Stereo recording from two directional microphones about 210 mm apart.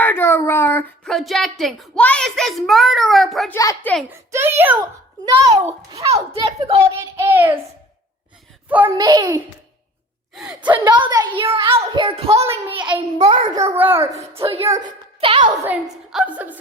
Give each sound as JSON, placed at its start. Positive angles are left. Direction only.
{"t": 0.0, "sound": "a child's voice", "side_deg": 10}
{"t": 3.5, "sound": "a child's voice", "side_deg": 15}
{"t": 4.3, "sound": "a woman's voice", "side_deg": -10}
{"t": 6.3, "sound": "a child's voice", "side_deg": -30}
{"t": 7.2, "sound": "a woman's voice", "side_deg": -10}
{"t": 9.0, "sound": "a woman's voice", "side_deg": -20}
{"t": 10.3, "sound": "a woman's voice", "side_deg": 0}
{"t": 10.6, "sound": "a child's voice", "side_deg": -20}
{"t": 13.7, "sound": "a woman's voice", "side_deg": -10}
{"t": 14.3, "sound": "a child's voice", "side_deg": -25}
{"t": 15.6, "sound": "a woman's voice", "side_deg": -5}